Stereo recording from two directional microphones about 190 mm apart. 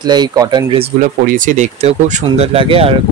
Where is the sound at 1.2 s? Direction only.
40° right (ahead or behind).